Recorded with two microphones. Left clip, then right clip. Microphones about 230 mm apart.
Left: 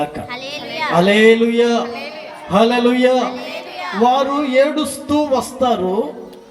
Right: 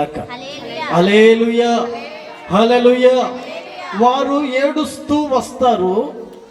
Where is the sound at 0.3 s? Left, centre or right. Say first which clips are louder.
Left 2 dB; left.